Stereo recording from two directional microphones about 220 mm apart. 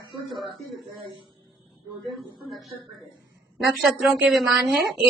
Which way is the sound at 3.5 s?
Centre (ahead or behind).